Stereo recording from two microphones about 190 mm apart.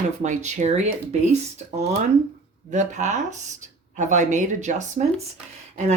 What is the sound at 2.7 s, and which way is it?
Speech, 40° right (ahead or behind).